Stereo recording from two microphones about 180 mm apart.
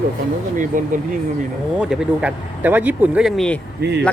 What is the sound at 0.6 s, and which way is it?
Speech, 45° right (ahead or behind).